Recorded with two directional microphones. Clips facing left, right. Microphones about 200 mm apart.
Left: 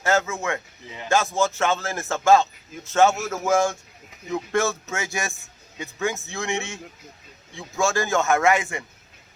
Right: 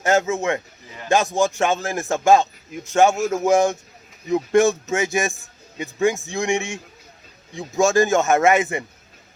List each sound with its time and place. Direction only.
0.0 s a man's voice: 15° right (ahead or behind)